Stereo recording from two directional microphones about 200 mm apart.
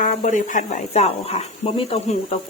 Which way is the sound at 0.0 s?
40° left (ahead or behind).